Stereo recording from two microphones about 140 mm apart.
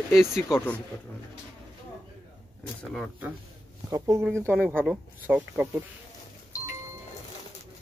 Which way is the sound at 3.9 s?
20° right (ahead or behind).